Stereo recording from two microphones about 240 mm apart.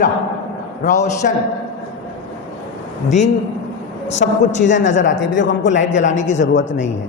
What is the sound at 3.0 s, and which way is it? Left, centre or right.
Speech, left.